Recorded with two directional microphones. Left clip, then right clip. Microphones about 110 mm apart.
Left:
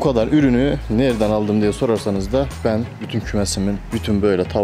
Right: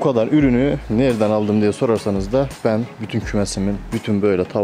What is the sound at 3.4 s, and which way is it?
Speech, 15° left (ahead or behind).